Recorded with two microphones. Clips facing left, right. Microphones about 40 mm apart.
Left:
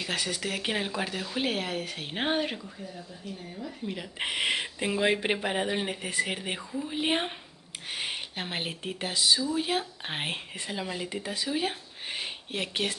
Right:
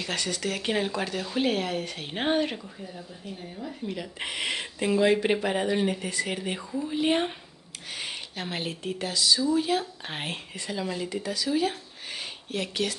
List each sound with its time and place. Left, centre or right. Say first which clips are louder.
0.0 s speech: right 1 dB; centre
3.3 s speech: even; centre
3.8 s speech: right 2 dB; centre
4.2 s speech: left 4 dB; left